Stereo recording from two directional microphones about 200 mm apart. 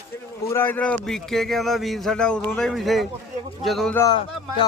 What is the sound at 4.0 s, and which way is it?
Speech, 20° left (ahead or behind).